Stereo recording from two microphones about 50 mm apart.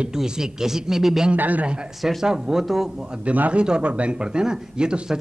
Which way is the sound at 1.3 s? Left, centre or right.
Right.